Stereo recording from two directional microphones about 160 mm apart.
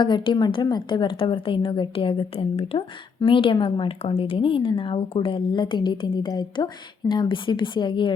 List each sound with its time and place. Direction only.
0.0 s a woman's voice: 30° left (ahead or behind)